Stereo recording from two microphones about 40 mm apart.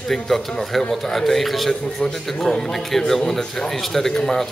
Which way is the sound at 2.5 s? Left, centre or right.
Centre.